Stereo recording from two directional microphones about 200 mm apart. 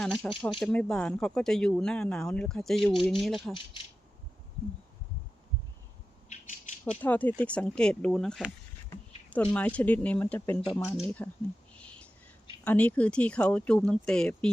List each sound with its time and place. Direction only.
0.0 s speech: 5° left (ahead or behind)
6.2 s rattle: 40° left (ahead or behind)
7.0 s speech: 10° left (ahead or behind)
11.8 s whispering: 5° left (ahead or behind)
12.6 s speech: 10° left (ahead or behind)